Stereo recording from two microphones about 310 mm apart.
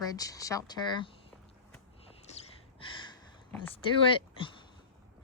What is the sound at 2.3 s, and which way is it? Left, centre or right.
Gasp, centre.